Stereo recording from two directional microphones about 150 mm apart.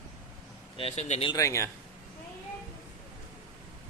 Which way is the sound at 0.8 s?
45° left (ahead or behind).